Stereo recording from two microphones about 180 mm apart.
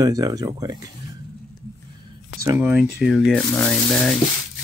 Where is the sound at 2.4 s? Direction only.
15° right (ahead or behind).